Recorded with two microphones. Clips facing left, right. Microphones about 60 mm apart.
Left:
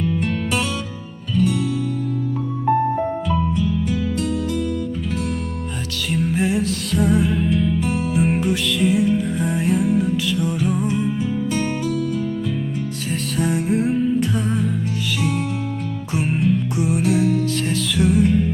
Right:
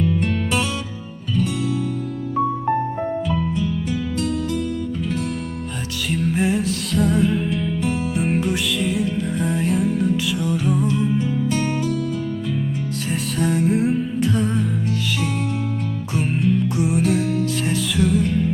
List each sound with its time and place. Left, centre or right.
0.0 s music: centre
3.2 s music: centre
6.1 s music: centre
10.8 s music: centre
11.1 s music: centre
13.4 s music: centre
18.0 s music: centre